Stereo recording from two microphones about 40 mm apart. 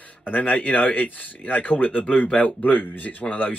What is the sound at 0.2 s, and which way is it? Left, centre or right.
Speech, left.